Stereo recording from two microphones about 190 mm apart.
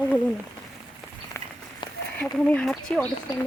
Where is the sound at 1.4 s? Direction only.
15° left (ahead or behind).